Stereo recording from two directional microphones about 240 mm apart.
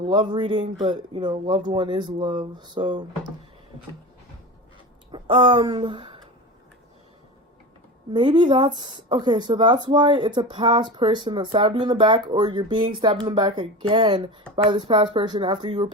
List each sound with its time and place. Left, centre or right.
0.0 s speech: centre
5.1 s speech: right
8.1 s speech: centre